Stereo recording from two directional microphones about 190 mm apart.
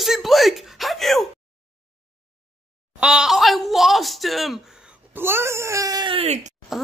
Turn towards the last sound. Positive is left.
turn(degrees=0)  # may be behind; listen again after turning